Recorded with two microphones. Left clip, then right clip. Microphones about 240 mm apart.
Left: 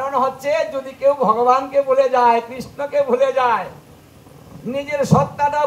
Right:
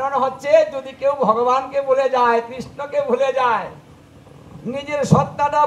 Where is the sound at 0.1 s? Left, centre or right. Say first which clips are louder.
Right 4 dB; right.